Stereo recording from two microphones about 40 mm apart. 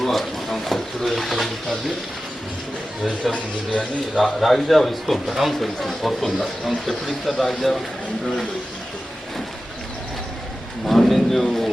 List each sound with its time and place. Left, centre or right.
0.0 s speech: centre
3.3 s a man's voice: left
4.4 s speech: centre
10.8 s a sound: centre